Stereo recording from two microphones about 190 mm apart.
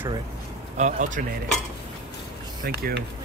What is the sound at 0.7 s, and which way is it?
Speech, 40° right (ahead or behind).